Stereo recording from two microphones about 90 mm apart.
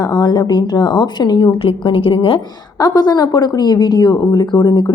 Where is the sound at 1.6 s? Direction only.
75° left (ahead or behind).